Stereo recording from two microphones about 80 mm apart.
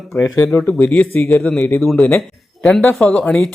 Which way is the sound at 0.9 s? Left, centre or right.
Left.